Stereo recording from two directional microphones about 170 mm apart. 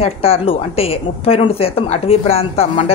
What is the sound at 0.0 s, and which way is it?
Speech, 35° left (ahead or behind).